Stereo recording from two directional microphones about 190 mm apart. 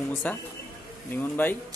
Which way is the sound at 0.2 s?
10° left (ahead or behind).